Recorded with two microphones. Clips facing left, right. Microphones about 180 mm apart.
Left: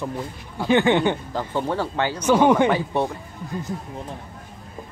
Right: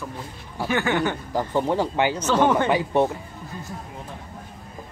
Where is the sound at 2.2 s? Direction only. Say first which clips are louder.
Left 5 dB; 10° left (ahead or behind).